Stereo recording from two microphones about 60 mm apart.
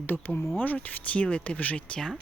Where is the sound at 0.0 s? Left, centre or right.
Left.